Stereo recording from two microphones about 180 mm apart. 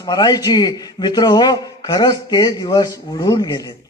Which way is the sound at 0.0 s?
25° left (ahead or behind).